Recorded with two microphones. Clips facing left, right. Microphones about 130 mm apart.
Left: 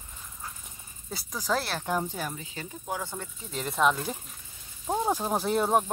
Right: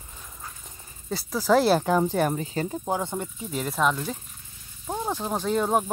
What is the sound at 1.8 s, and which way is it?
Speech, 60° right (ahead or behind).